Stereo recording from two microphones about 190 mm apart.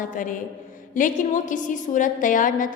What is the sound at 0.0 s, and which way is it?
A woman's voice, 45° left (ahead or behind).